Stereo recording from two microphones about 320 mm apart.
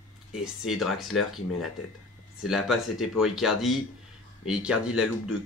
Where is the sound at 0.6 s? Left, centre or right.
Centre.